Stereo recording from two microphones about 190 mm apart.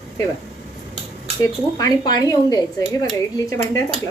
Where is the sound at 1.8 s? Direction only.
20° left (ahead or behind).